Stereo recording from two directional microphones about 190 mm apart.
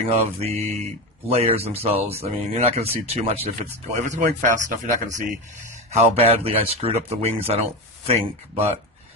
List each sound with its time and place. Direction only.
0.0 s speech: 30° right (ahead or behind)